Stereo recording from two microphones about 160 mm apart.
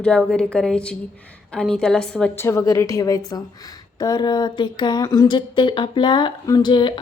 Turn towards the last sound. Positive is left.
turn(degrees=30)  # may be behind; listen again after turning